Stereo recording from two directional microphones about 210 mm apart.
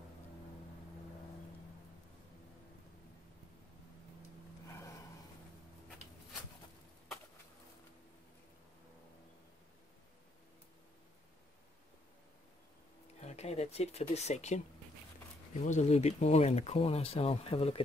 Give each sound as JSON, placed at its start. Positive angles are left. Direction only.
{"t": 13.2, "sound": "speech", "side_deg": 30}
{"t": 15.6, "sound": "speech", "side_deg": 35}